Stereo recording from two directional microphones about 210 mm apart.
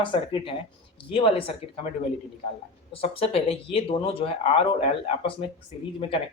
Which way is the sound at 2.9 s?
30° left (ahead or behind).